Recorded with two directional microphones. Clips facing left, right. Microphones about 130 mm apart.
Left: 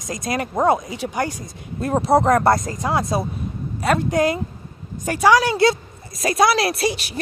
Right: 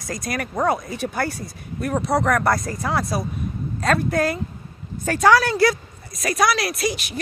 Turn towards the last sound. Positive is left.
turn(degrees=30)  # may be behind; listen again after turning